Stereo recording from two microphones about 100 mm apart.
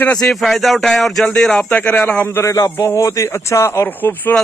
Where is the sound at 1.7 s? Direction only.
15° left (ahead or behind).